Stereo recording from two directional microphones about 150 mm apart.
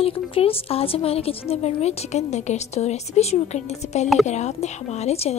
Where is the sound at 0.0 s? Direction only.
40° left (ahead or behind).